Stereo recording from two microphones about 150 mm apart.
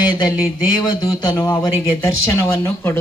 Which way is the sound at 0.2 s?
25° left (ahead or behind).